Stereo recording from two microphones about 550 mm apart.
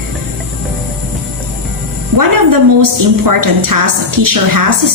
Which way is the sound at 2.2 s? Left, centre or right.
Right.